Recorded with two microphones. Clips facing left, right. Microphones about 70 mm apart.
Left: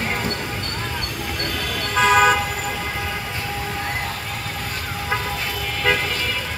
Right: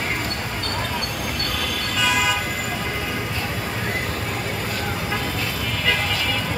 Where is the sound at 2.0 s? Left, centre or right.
Left.